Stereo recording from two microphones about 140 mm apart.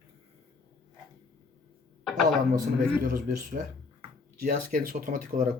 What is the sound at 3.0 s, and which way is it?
Speech, 90° right.